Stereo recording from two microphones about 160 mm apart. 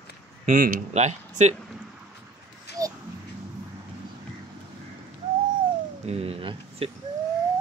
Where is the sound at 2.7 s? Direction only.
90° left.